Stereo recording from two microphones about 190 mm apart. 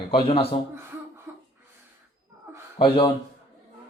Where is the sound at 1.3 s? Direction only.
10° right (ahead or behind).